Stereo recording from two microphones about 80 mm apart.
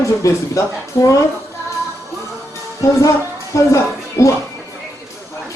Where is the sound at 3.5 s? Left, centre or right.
Left.